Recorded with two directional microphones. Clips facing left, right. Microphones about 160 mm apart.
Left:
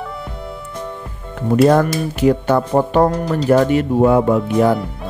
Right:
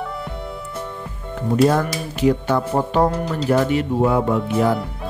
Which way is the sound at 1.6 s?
55° left (ahead or behind).